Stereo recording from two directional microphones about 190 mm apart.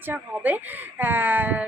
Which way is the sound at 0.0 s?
10° right (ahead or behind).